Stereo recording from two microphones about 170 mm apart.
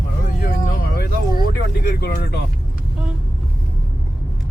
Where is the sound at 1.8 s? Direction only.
65° left (ahead or behind).